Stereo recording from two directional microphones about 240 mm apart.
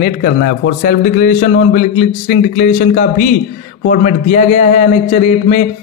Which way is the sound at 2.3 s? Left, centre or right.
Left.